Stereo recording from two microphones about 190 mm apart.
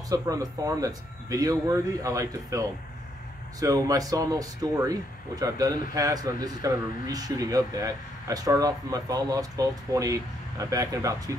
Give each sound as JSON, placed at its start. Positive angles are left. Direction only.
{"t": 0.1, "sound": "speech", "side_deg": -20}